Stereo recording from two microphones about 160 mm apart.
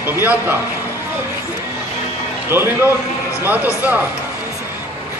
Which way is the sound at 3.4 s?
10° right (ahead or behind).